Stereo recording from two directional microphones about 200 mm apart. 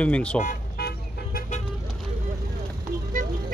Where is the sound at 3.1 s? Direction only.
40° right (ahead or behind).